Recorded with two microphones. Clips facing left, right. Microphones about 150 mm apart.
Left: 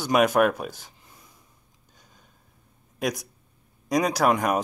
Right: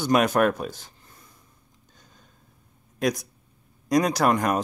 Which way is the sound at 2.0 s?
5° left (ahead or behind).